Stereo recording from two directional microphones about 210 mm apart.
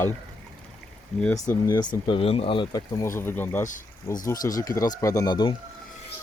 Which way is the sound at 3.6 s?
40° left (ahead or behind).